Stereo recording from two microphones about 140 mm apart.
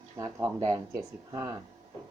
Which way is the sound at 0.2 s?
25° right (ahead or behind).